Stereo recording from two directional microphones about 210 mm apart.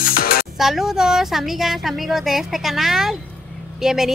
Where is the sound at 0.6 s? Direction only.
Centre (ahead or behind).